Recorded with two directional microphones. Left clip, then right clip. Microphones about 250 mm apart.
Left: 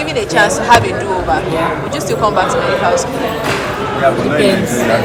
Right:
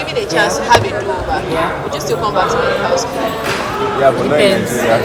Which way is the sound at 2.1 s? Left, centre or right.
Centre.